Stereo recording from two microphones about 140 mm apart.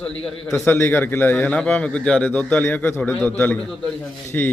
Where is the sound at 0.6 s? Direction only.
15° left (ahead or behind).